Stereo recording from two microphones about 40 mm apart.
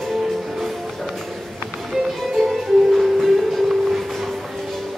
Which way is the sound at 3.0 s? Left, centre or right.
Centre.